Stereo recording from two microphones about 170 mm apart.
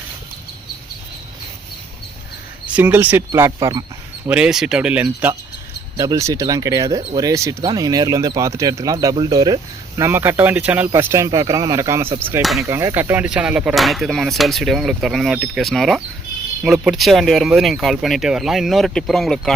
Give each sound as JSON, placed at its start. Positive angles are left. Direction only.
{"t": 2.6, "sound": "speech", "side_deg": -10}
{"t": 4.3, "sound": "speech", "side_deg": -5}
{"t": 6.0, "sound": "speech", "side_deg": -20}
{"t": 12.4, "sound": "speech", "side_deg": 0}
{"t": 12.6, "sound": "speech", "side_deg": -15}